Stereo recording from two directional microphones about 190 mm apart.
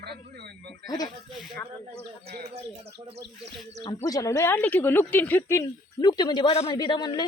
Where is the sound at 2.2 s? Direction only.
55° right (ahead or behind).